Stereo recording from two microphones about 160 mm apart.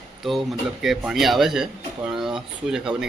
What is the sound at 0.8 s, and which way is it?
A man's voice, centre (ahead or behind).